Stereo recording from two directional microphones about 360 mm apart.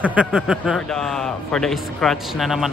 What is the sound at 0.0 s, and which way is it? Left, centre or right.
A man's voice, centre.